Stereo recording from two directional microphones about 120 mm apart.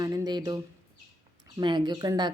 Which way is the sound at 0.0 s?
35° right (ahead or behind).